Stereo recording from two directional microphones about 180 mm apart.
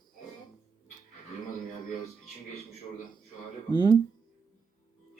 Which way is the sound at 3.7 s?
25° left (ahead or behind).